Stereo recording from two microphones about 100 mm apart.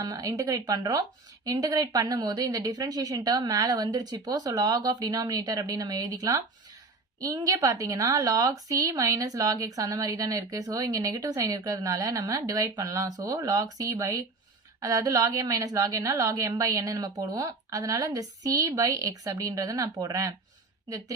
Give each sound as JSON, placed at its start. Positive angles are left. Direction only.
{"t": 0.0, "sound": "a woman's voice", "side_deg": -35}